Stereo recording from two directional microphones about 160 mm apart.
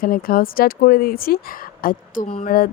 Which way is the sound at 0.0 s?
65° left (ahead or behind).